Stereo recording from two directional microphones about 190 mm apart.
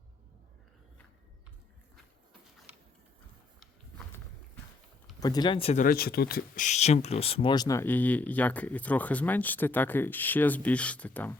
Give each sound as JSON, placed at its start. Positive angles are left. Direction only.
{"t": 2.7, "sound": "a sound", "side_deg": -10}
{"t": 5.2, "sound": "speech", "side_deg": 20}
{"t": 5.8, "sound": "speech", "side_deg": 55}